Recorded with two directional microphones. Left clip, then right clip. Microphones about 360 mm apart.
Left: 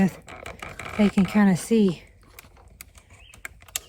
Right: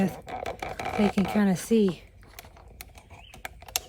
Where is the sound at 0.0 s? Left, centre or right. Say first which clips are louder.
Left 1 dB; centre.